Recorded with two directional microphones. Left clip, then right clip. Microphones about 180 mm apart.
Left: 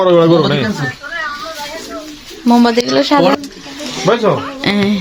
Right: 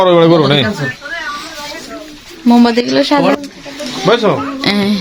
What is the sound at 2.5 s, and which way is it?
Speech, centre (ahead or behind).